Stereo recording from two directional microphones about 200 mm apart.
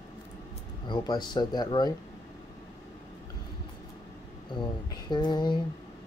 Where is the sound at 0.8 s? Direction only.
20° left (ahead or behind).